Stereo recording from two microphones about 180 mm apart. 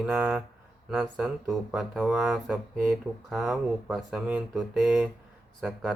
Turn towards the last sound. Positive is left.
turn(degrees=0)  # may be behind; listen again after turning